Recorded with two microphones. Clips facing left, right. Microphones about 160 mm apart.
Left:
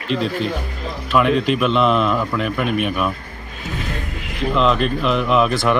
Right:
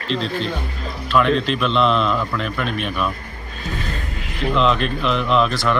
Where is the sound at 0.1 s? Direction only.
10° left (ahead or behind).